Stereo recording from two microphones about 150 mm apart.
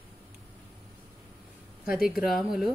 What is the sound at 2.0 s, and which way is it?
Speech, 5° right (ahead or behind).